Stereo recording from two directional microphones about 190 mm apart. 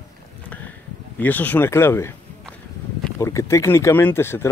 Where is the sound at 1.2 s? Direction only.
10° left (ahead or behind).